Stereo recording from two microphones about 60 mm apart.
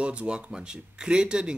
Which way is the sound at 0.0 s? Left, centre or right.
Right.